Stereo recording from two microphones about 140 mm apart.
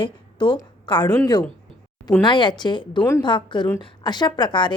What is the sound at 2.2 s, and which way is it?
A woman's voice, 35° left (ahead or behind).